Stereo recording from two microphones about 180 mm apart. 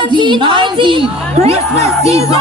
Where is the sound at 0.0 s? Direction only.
25° right (ahead or behind).